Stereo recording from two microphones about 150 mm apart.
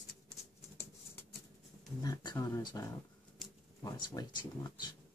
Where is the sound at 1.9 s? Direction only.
25° left (ahead or behind).